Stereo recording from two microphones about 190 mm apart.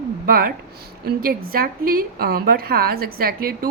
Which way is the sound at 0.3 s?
50° right (ahead or behind).